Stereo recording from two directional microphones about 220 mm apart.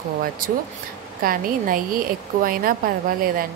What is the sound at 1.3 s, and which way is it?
Speech, 40° right (ahead or behind).